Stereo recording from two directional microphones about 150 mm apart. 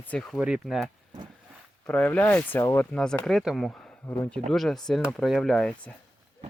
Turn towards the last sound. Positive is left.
turn(degrees=5)  # may be behind; listen again after turning